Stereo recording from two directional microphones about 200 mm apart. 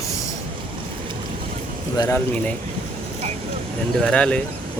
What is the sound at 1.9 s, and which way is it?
Speech, 20° left (ahead or behind).